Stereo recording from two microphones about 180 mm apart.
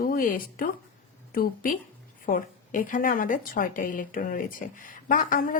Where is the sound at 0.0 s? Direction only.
50° left (ahead or behind).